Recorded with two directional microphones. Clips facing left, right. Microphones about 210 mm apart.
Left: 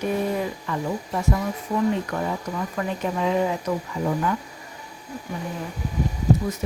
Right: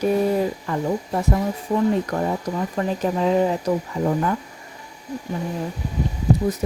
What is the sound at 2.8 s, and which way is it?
Speech, 35° right (ahead or behind).